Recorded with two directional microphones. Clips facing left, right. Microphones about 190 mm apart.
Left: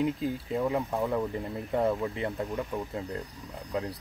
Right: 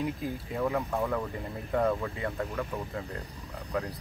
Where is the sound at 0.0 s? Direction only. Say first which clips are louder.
Left 4 dB; 20° left (ahead or behind).